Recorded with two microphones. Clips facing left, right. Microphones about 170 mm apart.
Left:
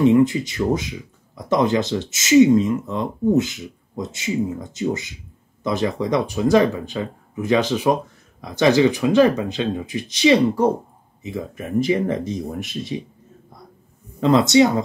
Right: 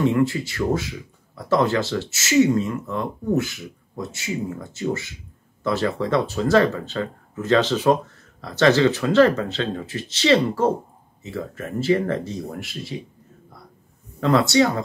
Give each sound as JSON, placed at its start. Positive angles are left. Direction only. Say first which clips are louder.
{"t": 0.0, "sound": "speech", "louder": "left 5 dB", "side_deg": 20}
{"t": 14.2, "sound": "speech", "louder": "left 3 dB", "side_deg": 20}